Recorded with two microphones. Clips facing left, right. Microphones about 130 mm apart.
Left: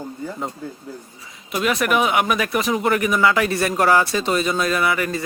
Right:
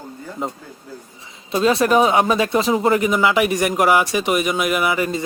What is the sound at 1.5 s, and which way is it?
Speech, 30° right (ahead or behind).